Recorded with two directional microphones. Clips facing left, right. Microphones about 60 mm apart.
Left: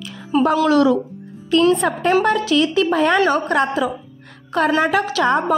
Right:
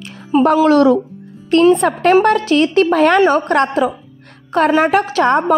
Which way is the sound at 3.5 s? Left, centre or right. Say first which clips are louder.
Right 4 dB; right.